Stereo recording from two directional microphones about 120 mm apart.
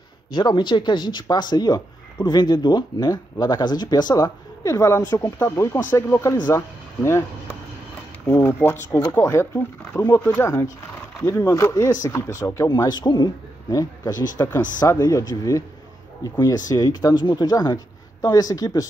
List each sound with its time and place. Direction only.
0.3 s speech: 40° left (ahead or behind); by 7.2 s 20° left (ahead or behind)
8.3 s speech: 20° left (ahead or behind)
12.6 s speech: 35° left (ahead or behind)